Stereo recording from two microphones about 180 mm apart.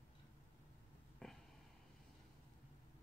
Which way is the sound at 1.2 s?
5° left (ahead or behind).